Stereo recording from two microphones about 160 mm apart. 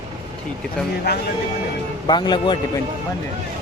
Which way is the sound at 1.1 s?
90° left.